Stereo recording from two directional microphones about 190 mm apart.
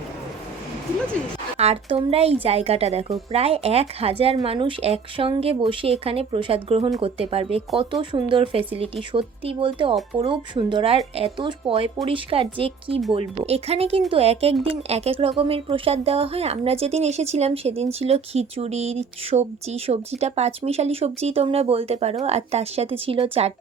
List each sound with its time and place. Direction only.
1.5 s speech: 30° right (ahead or behind)